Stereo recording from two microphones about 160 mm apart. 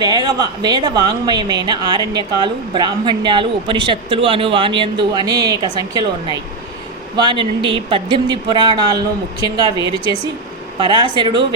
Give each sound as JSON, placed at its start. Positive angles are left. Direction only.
{"t": 0.0, "sound": "a woman's voice", "side_deg": -25}